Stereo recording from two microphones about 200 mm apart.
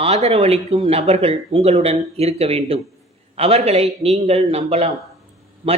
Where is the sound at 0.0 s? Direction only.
30° right (ahead or behind).